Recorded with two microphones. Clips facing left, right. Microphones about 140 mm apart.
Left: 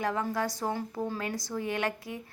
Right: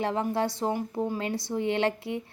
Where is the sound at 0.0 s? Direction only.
25° right (ahead or behind).